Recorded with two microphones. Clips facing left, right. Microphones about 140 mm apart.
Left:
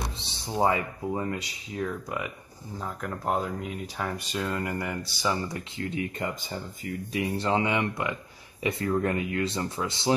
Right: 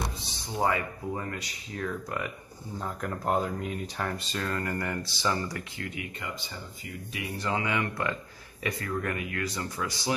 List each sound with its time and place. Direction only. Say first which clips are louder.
0.2 s speech: left 5 dB; 25° left (ahead or behind)
1.8 s speech: left 2 dB; 10° left (ahead or behind)
5.5 s speech: left 4 dB; 25° left (ahead or behind)
6.1 s speech: left 6 dB; 45° left (ahead or behind)
7.2 s speech: left 5 dB; 30° left (ahead or behind)